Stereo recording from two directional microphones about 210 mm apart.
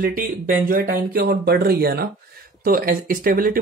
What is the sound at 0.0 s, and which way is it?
Speech, 45° right (ahead or behind).